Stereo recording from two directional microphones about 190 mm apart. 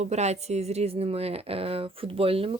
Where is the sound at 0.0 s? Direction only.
35° right (ahead or behind).